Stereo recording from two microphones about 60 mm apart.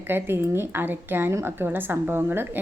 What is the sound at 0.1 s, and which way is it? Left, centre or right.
A woman's voice, right.